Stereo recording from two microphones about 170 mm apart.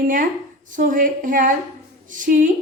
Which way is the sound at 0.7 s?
50° right (ahead or behind).